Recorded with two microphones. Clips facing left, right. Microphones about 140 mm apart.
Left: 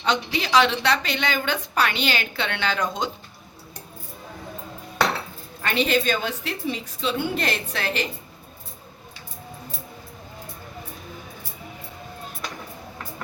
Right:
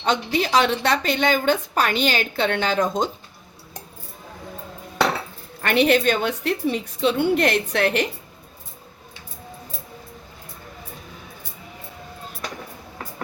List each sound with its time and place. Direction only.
0.0 s a woman's voice: 50° right (ahead or behind)
5.6 s a woman's voice: 60° right (ahead or behind)